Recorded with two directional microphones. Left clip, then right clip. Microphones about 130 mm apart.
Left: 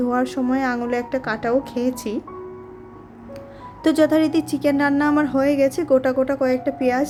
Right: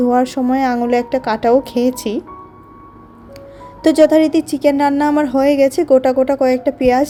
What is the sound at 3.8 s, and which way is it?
Speech, 30° right (ahead or behind).